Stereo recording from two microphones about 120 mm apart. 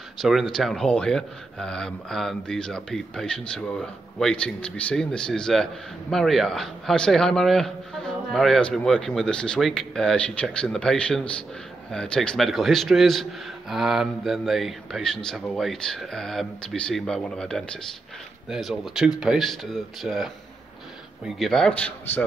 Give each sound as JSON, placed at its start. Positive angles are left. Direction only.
{"t": 0.2, "sound": "speech", "side_deg": 0}
{"t": 21.4, "sound": "a man's voice", "side_deg": 5}